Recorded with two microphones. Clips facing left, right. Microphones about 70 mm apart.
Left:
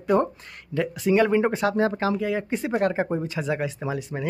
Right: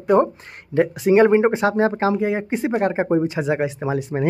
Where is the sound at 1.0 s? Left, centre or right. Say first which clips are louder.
Right 5 dB; right.